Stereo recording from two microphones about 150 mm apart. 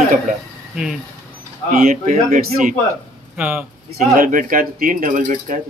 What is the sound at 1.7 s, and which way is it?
Speech, 65° right (ahead or behind).